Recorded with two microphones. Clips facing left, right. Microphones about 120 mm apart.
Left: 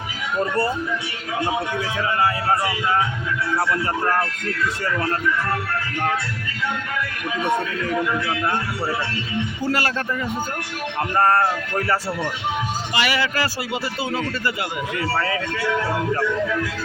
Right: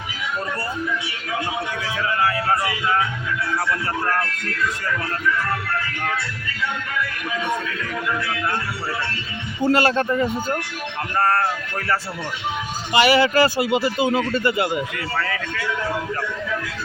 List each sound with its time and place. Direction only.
2.0 s speech: 20° left (ahead or behind)
4.0 s speech: 20° left (ahead or behind)
9.6 s speech: 25° right (ahead or behind)
11.2 s speech: 20° left (ahead or behind)
12.9 s speech: 25° right (ahead or behind)